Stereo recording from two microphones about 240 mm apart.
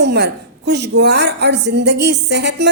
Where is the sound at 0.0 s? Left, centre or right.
Right.